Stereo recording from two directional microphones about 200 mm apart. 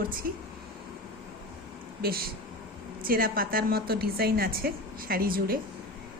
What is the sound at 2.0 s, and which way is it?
A woman's voice, 50° right (ahead or behind).